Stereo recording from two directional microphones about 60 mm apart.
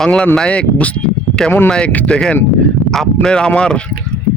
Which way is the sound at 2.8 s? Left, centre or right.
Centre.